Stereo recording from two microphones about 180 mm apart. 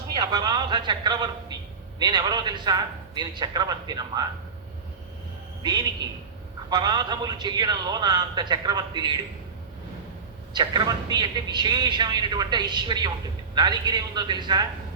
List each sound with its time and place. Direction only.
0.1 s a man's voice: 20° right (ahead or behind)
5.6 s a man's voice: 25° right (ahead or behind)
10.5 s a man's voice: 25° right (ahead or behind)